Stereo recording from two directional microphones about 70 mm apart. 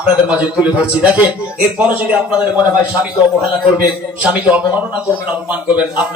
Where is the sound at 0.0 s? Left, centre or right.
Centre.